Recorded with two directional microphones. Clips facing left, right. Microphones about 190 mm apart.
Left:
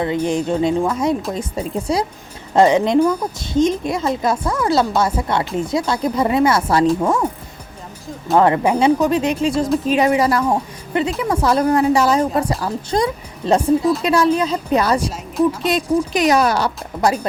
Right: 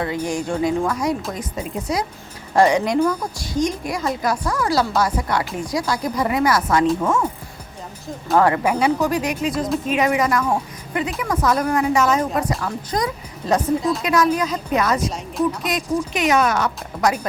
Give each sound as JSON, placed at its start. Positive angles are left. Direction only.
{"t": 0.0, "sound": "a woman's voice", "side_deg": 20}
{"t": 8.4, "sound": "a woman's voice", "side_deg": 25}